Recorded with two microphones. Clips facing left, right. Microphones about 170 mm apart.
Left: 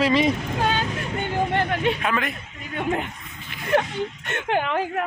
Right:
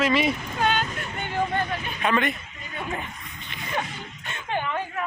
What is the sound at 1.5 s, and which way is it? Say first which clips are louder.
Speech: left 6 dB; 75° left (ahead or behind).